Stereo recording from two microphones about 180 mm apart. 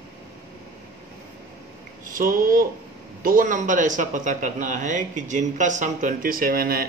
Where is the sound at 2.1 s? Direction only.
50° right (ahead or behind).